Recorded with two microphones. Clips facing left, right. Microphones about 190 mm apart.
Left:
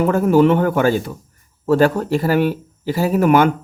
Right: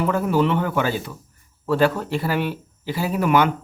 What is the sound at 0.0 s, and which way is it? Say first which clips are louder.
Speech: left 6 dB; 50° left (ahead or behind).